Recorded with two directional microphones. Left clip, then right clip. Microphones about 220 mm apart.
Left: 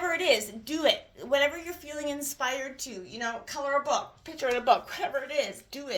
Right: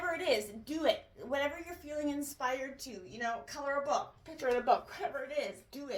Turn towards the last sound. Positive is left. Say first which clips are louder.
# left 6 dB
turn(degrees=40)  # may be behind; listen again after turning